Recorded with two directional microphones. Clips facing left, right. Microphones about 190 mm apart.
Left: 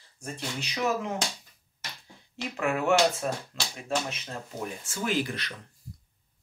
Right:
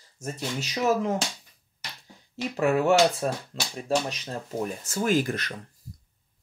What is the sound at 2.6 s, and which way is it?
Speech, 35° right (ahead or behind).